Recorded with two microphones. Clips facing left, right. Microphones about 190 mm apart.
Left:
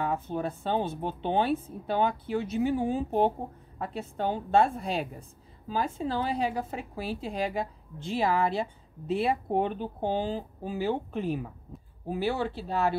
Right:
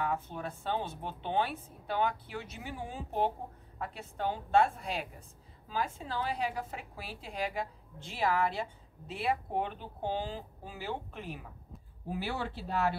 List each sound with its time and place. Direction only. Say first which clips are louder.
0.0 s a woman's voice: left 5 dB; 30° left (ahead or behind)